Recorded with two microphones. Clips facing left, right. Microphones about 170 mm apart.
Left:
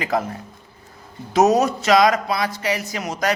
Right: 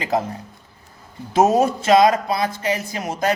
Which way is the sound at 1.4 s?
30° right (ahead or behind).